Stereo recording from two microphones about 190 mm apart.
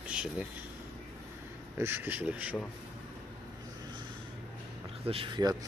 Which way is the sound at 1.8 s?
10° right (ahead or behind).